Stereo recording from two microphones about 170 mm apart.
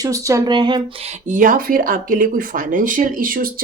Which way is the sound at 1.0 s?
45° right (ahead or behind).